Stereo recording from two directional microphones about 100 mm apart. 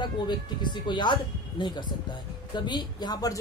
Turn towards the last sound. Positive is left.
turn(degrees=40)  # may be behind; listen again after turning